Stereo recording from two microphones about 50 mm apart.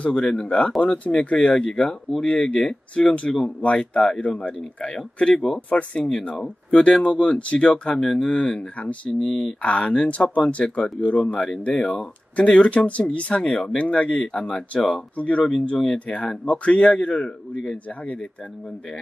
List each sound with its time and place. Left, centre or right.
0.0 s a man's voice: centre
5.7 s a man's voice: left
8.5 s a man's voice: left
9.2 s speech: centre
9.6 s a man's voice: left